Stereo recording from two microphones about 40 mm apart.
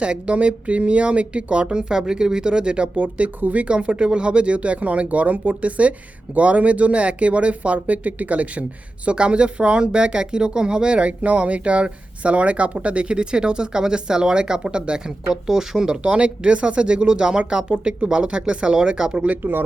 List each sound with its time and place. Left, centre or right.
0.0 s speech: right
2.9 s speech: right
9.0 s speech: right
16.0 s speech: right
19.4 s speech: right